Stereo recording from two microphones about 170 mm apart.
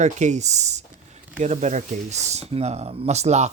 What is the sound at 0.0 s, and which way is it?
Speech, 45° right (ahead or behind).